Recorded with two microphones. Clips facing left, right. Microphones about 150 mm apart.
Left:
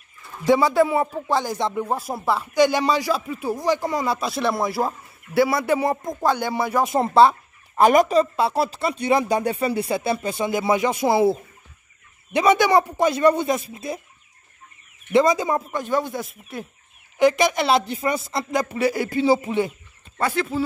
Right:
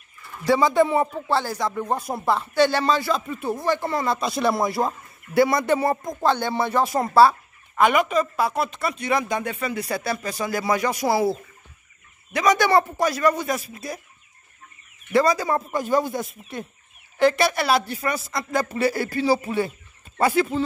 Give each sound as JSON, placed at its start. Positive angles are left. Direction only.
{"t": 0.5, "sound": "speech", "side_deg": 10}
{"t": 1.1, "sound": "speech", "side_deg": 15}
{"t": 1.9, "sound": "speech", "side_deg": 0}
{"t": 6.9, "sound": "a man's voice", "side_deg": 20}
{"t": 7.7, "sound": "a man's voice", "side_deg": 40}
{"t": 12.6, "sound": "speech", "side_deg": 15}
{"t": 13.0, "sound": "a man's voice", "side_deg": 25}
{"t": 15.1, "sound": "a man's voice", "side_deg": 20}
{"t": 15.7, "sound": "speech", "side_deg": 0}
{"t": 17.2, "sound": "a man's voice", "side_deg": 15}
{"t": 20.2, "sound": "speech", "side_deg": -10}